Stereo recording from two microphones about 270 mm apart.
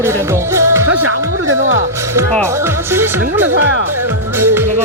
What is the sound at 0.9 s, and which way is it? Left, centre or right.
Music, right.